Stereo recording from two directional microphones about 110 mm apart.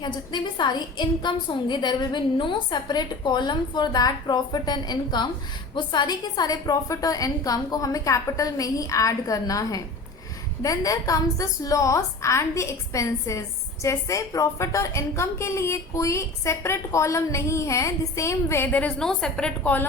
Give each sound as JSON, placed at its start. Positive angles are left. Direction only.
{"t": 0.0, "sound": "a woman's voice", "side_deg": 45}